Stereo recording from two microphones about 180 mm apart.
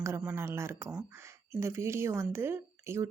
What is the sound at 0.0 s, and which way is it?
Speech, 10° right (ahead or behind).